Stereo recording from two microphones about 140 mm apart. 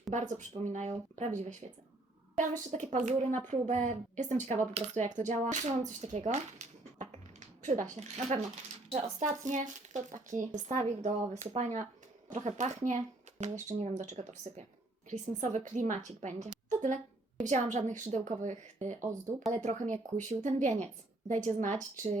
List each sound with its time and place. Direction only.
0.1 s speech: 60° right (ahead or behind)
16.6 s a sound: 60° right (ahead or behind)
17.4 s speech: 55° right (ahead or behind)